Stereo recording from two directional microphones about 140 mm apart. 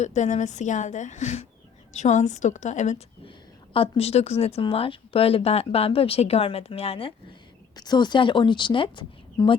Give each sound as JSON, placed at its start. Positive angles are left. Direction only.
{"t": 0.0, "sound": "a woman's voice", "side_deg": 55}
{"t": 3.2, "sound": "speech", "side_deg": 40}
{"t": 7.8, "sound": "a woman's voice", "side_deg": 30}